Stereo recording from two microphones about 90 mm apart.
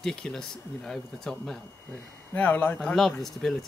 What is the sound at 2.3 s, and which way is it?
Speech, 20° left (ahead or behind).